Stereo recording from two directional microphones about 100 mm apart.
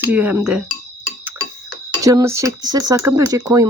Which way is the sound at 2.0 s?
35° right (ahead or behind).